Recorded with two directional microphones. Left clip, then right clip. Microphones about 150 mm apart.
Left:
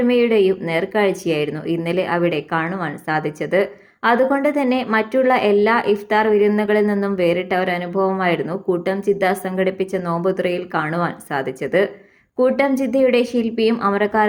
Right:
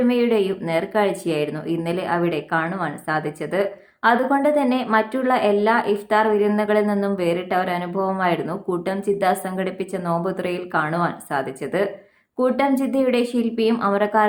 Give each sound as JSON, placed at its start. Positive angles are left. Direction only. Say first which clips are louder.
{"t": 0.0, "sound": "a woman's voice", "louder": "left 4 dB", "side_deg": 15}